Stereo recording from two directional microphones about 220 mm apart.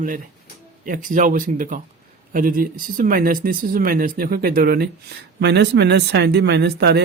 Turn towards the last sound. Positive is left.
turn(degrees=-50)  # may be behind; listen again after turning